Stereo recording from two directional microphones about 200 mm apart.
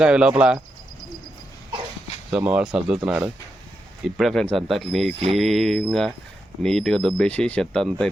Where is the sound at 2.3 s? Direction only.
5° right (ahead or behind).